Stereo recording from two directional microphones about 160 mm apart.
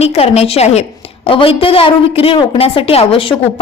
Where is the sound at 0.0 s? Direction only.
40° left (ahead or behind).